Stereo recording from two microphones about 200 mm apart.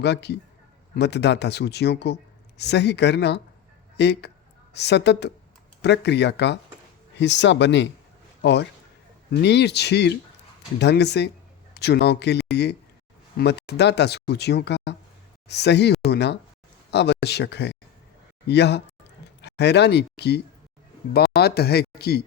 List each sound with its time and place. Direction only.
0.0 s a man's voice: 60° left (ahead or behind)